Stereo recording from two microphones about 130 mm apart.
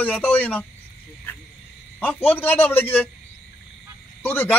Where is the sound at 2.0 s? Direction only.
15° left (ahead or behind).